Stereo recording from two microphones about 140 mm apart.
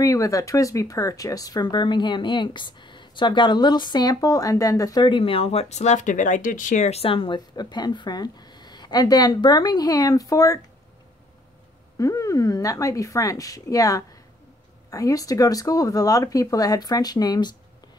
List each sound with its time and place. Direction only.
0.0 s speech: 25° left (ahead or behind)
12.0 s speech: 20° left (ahead or behind)